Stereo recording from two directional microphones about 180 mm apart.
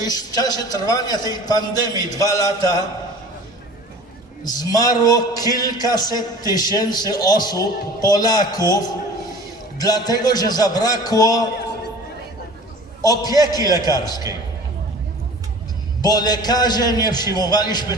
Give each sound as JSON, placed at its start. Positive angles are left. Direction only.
{"t": 0.0, "sound": "a man's voice", "side_deg": 20}
{"t": 4.4, "sound": "a man's voice", "side_deg": 20}
{"t": 13.0, "sound": "a man's voice", "side_deg": 20}
{"t": 16.0, "sound": "a man's voice", "side_deg": 20}